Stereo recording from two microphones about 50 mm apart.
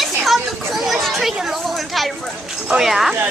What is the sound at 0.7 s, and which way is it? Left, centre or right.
Chatter, centre.